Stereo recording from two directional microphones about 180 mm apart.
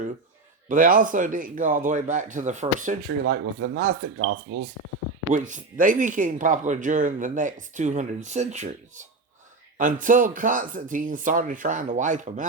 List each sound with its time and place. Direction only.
0.7 s speech: 50° right (ahead or behind)
3.2 s speech: 60° right (ahead or behind)
5.3 s speech: 45° right (ahead or behind)